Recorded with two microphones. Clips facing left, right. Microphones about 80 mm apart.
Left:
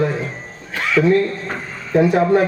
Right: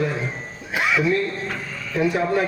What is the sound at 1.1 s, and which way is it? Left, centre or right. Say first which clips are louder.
A man's voice: left 6 dB; left.